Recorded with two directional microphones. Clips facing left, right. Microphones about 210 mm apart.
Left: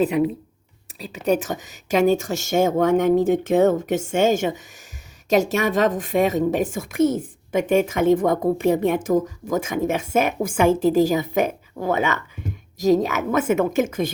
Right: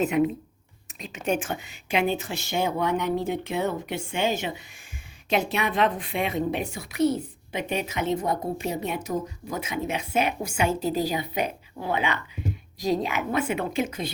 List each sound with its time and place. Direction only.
0.0 s speech: 35° left (ahead or behind)